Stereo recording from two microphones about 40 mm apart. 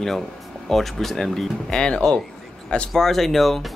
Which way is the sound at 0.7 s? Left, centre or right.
Centre.